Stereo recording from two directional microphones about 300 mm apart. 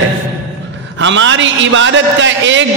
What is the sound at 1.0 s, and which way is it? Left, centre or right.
A man's voice, right.